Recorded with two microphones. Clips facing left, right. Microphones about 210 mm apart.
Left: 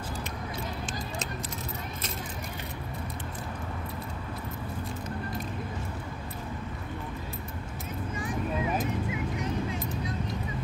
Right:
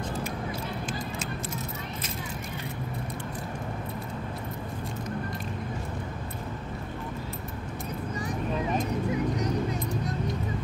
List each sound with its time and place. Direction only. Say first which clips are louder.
9.1 s vehicle: right 4 dB; 40° right (ahead or behind)